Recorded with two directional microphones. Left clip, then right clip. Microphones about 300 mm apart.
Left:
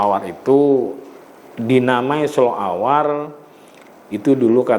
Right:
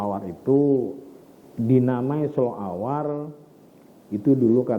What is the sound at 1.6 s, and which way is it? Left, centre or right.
A man's voice, centre.